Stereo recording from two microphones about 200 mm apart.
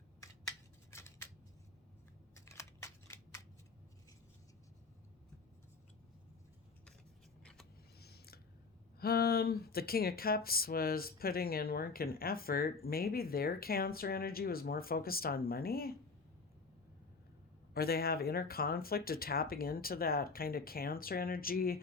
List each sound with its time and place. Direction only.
0.9 s scissors: 15° left (ahead or behind)
2.3 s scissors: 15° left (ahead or behind)
7.4 s vehicle: centre (ahead or behind)
7.9 s a sound: 55° left (ahead or behind)
9.0 s speech: 50° left (ahead or behind)
17.7 s speech: 50° left (ahead or behind)